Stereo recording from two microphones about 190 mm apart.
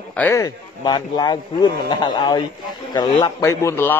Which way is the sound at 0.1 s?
10° left (ahead or behind).